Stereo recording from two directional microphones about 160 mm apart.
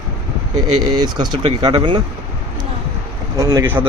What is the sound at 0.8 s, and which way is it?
Speech, 25° right (ahead or behind).